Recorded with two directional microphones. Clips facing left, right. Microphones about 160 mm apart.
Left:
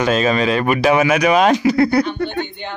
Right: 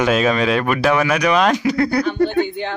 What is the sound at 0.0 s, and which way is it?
Speech, centre (ahead or behind).